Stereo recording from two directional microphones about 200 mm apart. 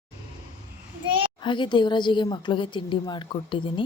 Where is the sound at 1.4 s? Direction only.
25° left (ahead or behind).